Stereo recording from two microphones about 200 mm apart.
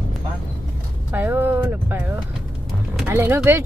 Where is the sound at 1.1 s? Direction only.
10° right (ahead or behind).